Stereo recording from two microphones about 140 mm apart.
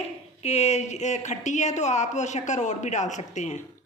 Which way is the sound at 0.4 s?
50° left (ahead or behind).